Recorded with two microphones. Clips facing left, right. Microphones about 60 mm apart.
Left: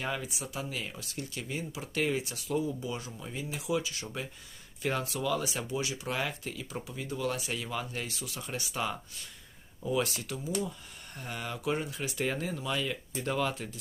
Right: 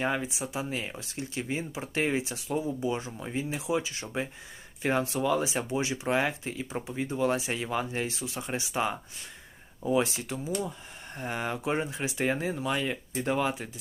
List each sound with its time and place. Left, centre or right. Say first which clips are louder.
0.0 s speech: right 5 dB; right